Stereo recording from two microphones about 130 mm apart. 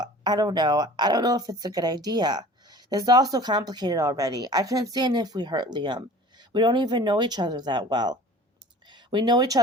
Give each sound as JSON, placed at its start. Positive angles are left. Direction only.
{"t": 0.0, "sound": "speech", "side_deg": -30}